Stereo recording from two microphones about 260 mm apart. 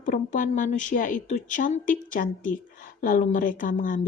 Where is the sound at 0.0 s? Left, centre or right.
Left.